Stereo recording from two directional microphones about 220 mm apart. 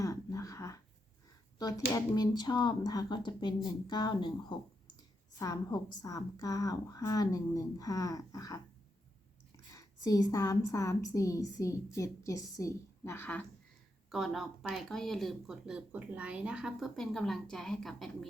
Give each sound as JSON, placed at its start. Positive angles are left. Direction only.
{"t": 0.0, "sound": "a sound", "side_deg": 15}
{"t": 1.5, "sound": "a woman's voice", "side_deg": 15}
{"t": 9.7, "sound": "a woman's voice", "side_deg": 15}